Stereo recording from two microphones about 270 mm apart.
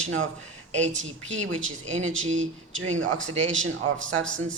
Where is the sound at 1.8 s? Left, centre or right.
Right.